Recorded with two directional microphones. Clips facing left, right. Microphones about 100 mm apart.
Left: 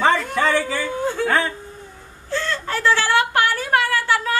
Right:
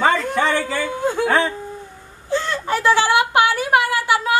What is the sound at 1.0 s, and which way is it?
Speech, 15° right (ahead or behind).